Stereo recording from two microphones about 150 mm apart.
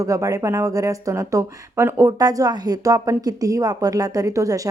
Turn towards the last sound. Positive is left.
turn(degrees=-20)  # may be behind; listen again after turning